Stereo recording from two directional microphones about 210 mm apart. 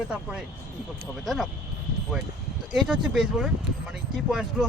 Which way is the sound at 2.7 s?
5° right (ahead or behind).